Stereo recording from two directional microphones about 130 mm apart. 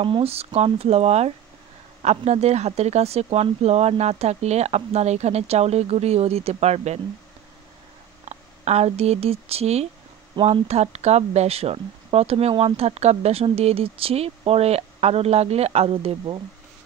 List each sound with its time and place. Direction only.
0.0 s speech: 50° right (ahead or behind)
8.3 s speech: 55° right (ahead or behind)